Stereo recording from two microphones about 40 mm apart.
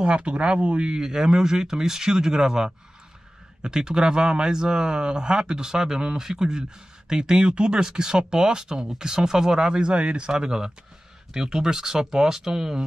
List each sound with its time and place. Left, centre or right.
0.0 s a man's voice: right